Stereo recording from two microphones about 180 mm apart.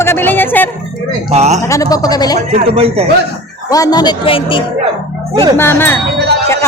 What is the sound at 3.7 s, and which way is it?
Speech, 20° left (ahead or behind).